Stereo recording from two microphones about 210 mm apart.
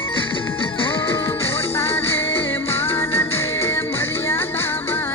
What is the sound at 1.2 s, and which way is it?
Music, 10° left (ahead or behind).